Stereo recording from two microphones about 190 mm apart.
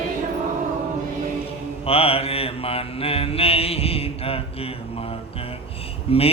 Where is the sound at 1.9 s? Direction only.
30° left (ahead or behind).